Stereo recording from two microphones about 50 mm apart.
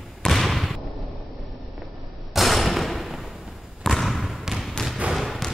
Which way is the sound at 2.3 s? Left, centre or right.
Centre.